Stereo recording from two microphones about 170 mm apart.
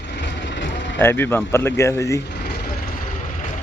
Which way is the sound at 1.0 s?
15° left (ahead or behind).